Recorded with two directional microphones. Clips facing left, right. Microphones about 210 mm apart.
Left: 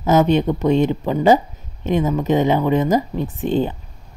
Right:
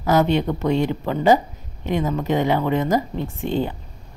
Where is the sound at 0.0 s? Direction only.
20° left (ahead or behind).